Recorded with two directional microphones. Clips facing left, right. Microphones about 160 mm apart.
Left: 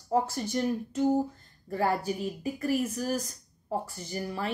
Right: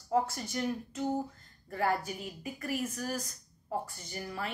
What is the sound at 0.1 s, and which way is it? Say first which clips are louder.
Speech: left 3 dB; 30° left (ahead or behind).